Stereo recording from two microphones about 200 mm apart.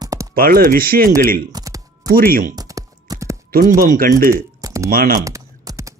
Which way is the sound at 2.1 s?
50° right (ahead or behind).